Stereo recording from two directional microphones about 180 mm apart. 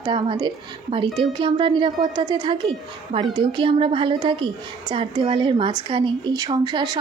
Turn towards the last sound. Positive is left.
turn(degrees=-25)  # may be behind; listen again after turning